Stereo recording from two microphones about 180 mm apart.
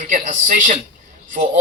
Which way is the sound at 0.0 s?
45° right (ahead or behind).